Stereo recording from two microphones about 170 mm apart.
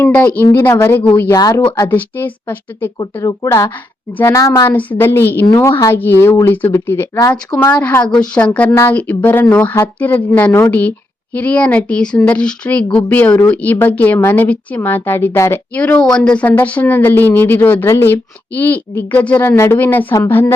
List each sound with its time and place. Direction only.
0.0 s a woman's voice: 10° left (ahead or behind)